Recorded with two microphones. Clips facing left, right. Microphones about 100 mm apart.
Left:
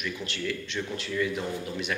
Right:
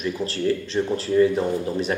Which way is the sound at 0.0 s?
35° right (ahead or behind).